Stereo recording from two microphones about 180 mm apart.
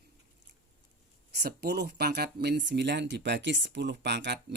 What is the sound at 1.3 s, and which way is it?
Speech, 65° right (ahead or behind).